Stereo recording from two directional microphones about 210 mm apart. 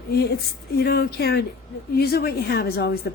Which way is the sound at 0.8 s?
45° left (ahead or behind).